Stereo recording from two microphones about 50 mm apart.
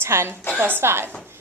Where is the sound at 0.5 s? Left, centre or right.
Right.